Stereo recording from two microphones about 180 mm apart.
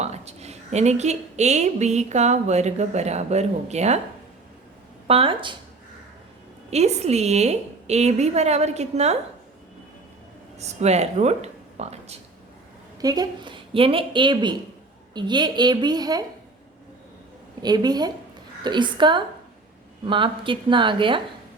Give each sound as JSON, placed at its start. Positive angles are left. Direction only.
{"t": 0.0, "sound": "a woman's voice", "side_deg": -35}
{"t": 5.0, "sound": "a woman's voice", "side_deg": -30}
{"t": 6.7, "sound": "a woman's voice", "side_deg": -35}
{"t": 10.6, "sound": "speech", "side_deg": -35}
{"t": 13.0, "sound": "a woman's voice", "side_deg": -20}
{"t": 17.6, "sound": "a woman's voice", "side_deg": -25}